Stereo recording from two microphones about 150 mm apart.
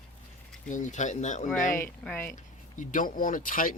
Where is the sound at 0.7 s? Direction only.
55° left (ahead or behind).